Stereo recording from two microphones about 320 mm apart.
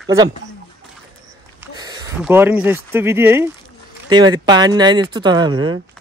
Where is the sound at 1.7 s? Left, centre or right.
Centre.